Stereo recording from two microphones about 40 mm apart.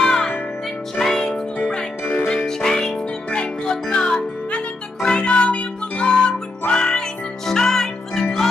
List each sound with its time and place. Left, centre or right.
0.0 s music: centre